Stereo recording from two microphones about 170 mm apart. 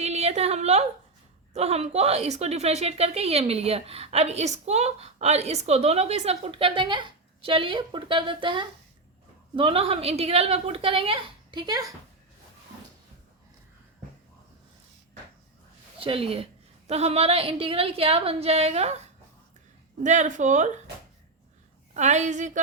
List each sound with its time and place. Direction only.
0.0 s a sound: 40° right (ahead or behind)
1.5 s a woman's voice: 40° right (ahead or behind); by 11.9 s 20° right (ahead or behind)
16.0 s a woman's voice: 35° right (ahead or behind)
21.9 s speech: 45° right (ahead or behind)